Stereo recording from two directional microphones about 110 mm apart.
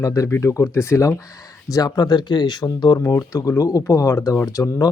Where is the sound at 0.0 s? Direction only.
30° left (ahead or behind).